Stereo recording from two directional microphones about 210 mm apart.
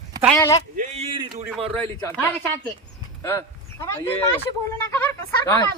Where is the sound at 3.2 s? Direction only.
15° left (ahead or behind).